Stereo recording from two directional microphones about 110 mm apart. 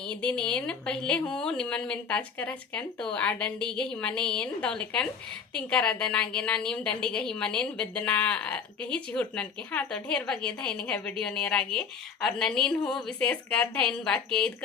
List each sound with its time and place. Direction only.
0.0 s a woman's voice: 10° left (ahead or behind)